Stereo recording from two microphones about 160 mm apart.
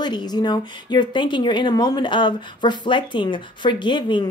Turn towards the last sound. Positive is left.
turn(degrees=30)  # may be behind; listen again after turning